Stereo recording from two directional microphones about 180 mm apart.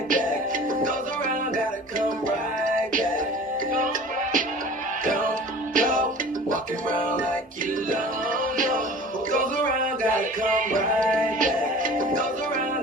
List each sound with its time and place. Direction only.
0.1 s music: 50° right (ahead or behind)
5.7 s music: 50° right (ahead or behind)
7.9 s music: 50° right (ahead or behind)